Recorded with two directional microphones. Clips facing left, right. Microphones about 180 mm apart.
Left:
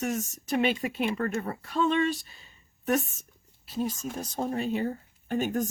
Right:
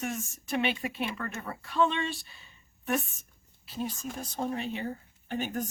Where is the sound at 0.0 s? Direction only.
40° left (ahead or behind).